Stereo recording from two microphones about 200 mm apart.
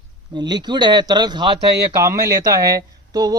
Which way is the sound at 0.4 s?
20° right (ahead or behind).